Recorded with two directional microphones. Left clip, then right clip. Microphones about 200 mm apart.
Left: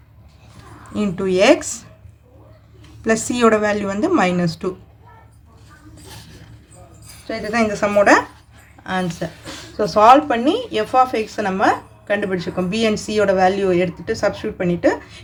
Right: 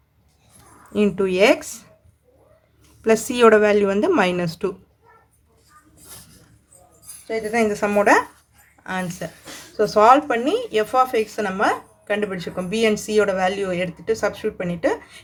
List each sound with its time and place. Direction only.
0.9 s speech: 30° right (ahead or behind)
3.0 s a woman's voice: 35° right (ahead or behind)
7.5 s speech: 10° right (ahead or behind)